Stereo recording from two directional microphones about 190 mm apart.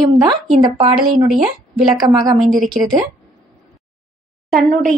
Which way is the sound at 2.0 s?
20° right (ahead or behind).